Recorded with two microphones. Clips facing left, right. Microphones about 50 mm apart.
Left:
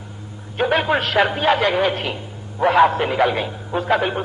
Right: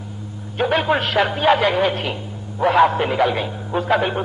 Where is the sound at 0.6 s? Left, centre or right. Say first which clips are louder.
Even; centre.